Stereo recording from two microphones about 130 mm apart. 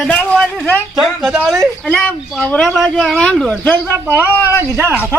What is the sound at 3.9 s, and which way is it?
Speech, 20° right (ahead or behind).